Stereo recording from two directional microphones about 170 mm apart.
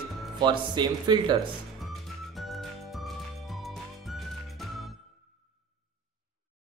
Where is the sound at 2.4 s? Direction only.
Centre (ahead or behind).